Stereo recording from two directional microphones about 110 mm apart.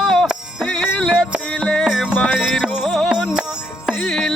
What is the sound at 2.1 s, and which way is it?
Music, 15° left (ahead or behind).